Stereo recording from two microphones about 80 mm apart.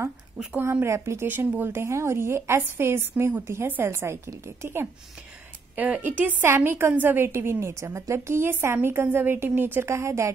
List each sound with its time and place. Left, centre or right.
0.6 s a woman's voice: right
1.2 s a woman's voice: right
5.8 s a woman's voice: right